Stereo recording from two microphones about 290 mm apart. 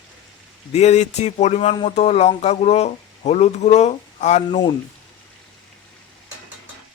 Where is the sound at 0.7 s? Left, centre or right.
Left.